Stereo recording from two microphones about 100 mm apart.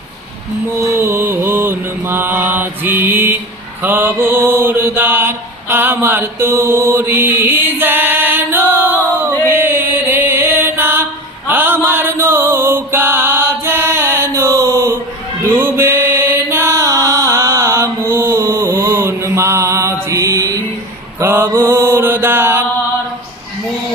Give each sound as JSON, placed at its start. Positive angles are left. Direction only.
{"t": 0.8, "sound": "mantra", "side_deg": -25}
{"t": 9.5, "sound": "chant", "side_deg": -20}
{"t": 11.4, "sound": "music", "side_deg": -20}
{"t": 15.5, "sound": "chant", "side_deg": -20}
{"t": 21.2, "sound": "mantra", "side_deg": -25}